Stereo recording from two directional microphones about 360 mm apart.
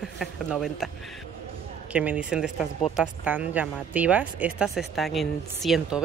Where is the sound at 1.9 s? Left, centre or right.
Centre.